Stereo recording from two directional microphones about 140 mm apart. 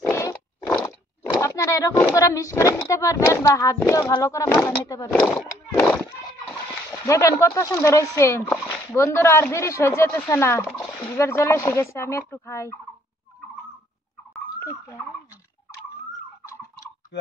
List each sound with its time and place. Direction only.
0.1 s a sound: 15° left (ahead or behind)
1.4 s speech: 20° left (ahead or behind)
4.5 s speech: 10° left (ahead or behind)
4.8 s speech: 25° left (ahead or behind)
5.4 s a sound: 10° left (ahead or behind)
7.1 s speech: 20° left (ahead or behind)